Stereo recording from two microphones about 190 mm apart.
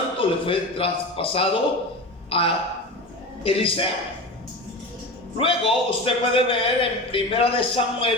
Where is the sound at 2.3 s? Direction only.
30° left (ahead or behind).